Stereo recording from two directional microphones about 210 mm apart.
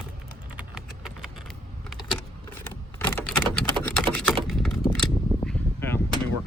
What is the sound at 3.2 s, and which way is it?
Typing, 5° left (ahead or behind).